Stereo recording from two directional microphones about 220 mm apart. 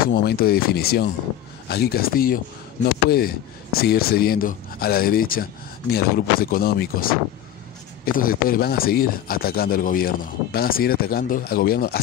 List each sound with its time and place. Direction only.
0.0 s speech: 45° left (ahead or behind)